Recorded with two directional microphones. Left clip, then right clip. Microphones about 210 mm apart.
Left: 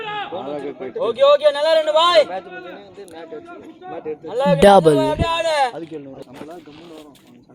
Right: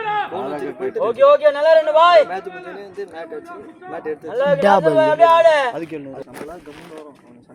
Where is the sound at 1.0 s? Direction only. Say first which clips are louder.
Right 1 dB; 40° left (ahead or behind).